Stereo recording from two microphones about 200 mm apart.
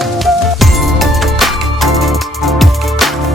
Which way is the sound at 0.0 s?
Centre (ahead or behind).